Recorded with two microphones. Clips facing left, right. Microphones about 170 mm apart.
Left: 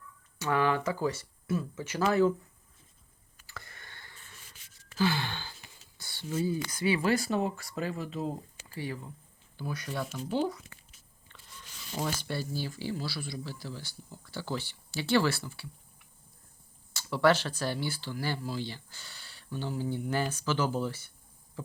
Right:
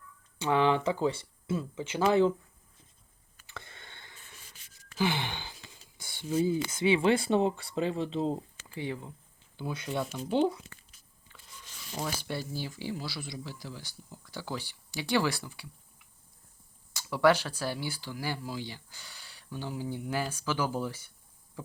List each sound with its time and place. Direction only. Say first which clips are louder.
0.3 s speech: right 2 dB; 25° right (ahead or behind)
3.4 s a sound: right 1 dB; 25° right (ahead or behind)
4.9 s gasp: left 1 dB; 20° right (ahead or behind)
6.0 s speech: right 3 dB; 15° right (ahead or behind)
12.1 s speech: left 1 dB; 15° right (ahead or behind)
16.9 s speech: right 1 dB; 15° right (ahead or behind)